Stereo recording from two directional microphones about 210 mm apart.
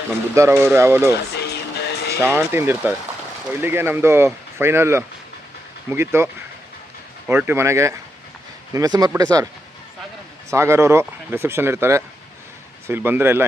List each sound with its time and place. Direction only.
0.3 s speech: 15° right (ahead or behind)
1.4 s music: 50° left (ahead or behind)
2.2 s speech: 10° right (ahead or behind)
7.3 s speech: 10° right (ahead or behind)
10.5 s speech: 15° right (ahead or behind)